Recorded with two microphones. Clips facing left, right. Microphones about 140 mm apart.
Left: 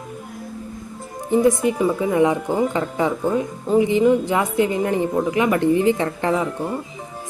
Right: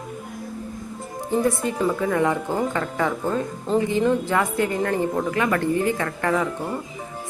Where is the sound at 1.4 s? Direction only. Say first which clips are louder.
Left 5 dB; 15° left (ahead or behind).